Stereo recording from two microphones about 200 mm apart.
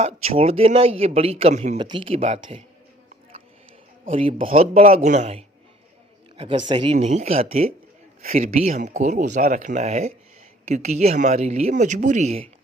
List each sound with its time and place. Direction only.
0.0 s a man's voice: 30° right (ahead or behind)
1.8 s a man's voice: 25° right (ahead or behind)
4.1 s a man's voice: 30° right (ahead or behind)
7.0 s speech: 35° right (ahead or behind)